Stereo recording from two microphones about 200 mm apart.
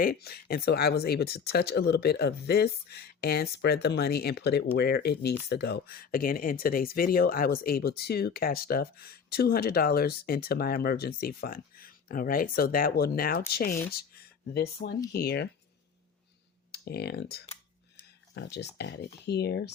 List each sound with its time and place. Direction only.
0.0 s speech: 50° left (ahead or behind)
16.7 s speech: 50° left (ahead or behind)